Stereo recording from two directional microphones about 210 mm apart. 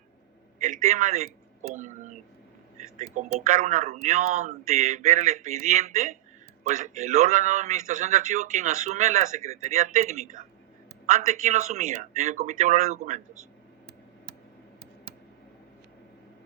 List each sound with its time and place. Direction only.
0.6 s speech: 35° right (ahead or behind)